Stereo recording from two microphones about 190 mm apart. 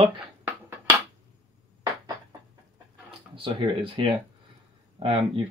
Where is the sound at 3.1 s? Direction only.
25° right (ahead or behind).